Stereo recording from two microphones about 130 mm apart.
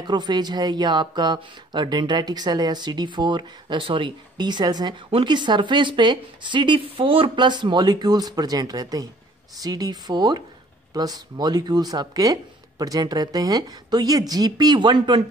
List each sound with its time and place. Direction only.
0.0 s speech: 35° right (ahead or behind)